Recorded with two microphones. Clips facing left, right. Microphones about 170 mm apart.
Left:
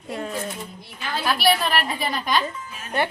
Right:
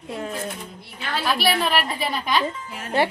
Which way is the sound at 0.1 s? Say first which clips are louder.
Even; 5° right (ahead or behind).